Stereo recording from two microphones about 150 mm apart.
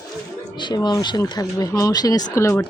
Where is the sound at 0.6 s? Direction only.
30° left (ahead or behind).